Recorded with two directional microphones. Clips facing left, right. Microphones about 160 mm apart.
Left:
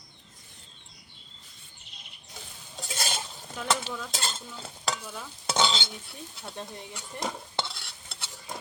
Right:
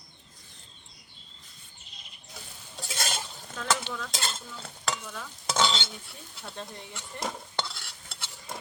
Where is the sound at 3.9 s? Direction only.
35° left (ahead or behind).